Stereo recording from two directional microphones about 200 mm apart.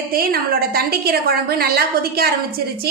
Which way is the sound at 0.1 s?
50° right (ahead or behind).